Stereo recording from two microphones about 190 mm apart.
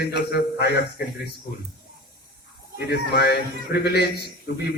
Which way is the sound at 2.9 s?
55° left (ahead or behind).